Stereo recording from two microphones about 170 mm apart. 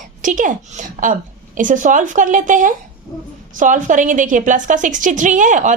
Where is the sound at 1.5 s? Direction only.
50° right (ahead or behind).